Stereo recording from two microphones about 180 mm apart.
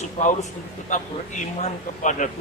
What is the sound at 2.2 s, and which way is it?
Speech, 45° left (ahead or behind).